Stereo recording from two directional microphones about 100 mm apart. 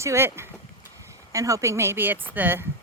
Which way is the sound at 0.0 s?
30° right (ahead or behind).